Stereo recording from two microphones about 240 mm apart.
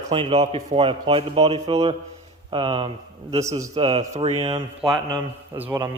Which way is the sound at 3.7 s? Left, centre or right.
Right.